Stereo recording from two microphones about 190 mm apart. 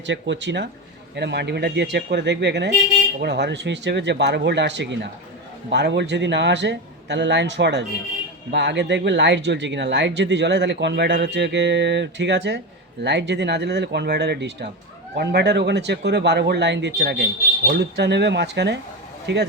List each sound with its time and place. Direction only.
0.0 s speech: 70° right (ahead or behind)